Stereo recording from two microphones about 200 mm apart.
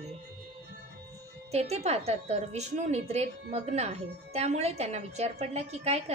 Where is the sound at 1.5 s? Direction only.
35° right (ahead or behind).